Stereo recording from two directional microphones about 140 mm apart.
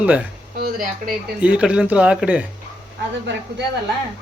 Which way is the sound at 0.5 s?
90° right.